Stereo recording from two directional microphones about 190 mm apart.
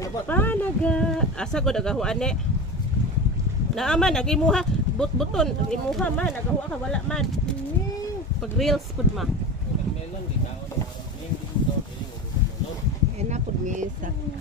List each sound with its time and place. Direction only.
0.0 s speech: 10° left (ahead or behind)
3.7 s speech: 5° left (ahead or behind)
8.5 s speech: centre (ahead or behind)
13.2 s speech: 40° right (ahead or behind)